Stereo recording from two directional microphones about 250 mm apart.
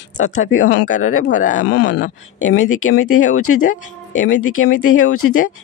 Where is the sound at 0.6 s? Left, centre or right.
Left.